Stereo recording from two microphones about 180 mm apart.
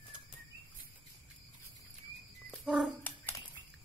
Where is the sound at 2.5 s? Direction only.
5° right (ahead or behind).